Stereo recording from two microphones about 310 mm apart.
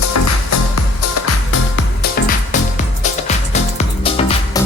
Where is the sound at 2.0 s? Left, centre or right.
Left.